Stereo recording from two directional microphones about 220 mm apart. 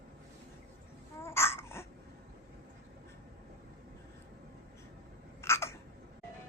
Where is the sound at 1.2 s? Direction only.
10° left (ahead or behind).